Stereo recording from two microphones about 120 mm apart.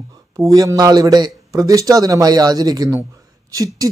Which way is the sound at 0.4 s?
25° right (ahead or behind).